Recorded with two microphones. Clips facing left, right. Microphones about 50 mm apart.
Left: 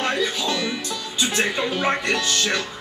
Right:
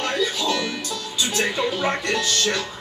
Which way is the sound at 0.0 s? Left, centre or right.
Left.